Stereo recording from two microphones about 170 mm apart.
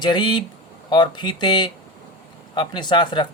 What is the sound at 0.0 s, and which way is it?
Speech, 25° left (ahead or behind).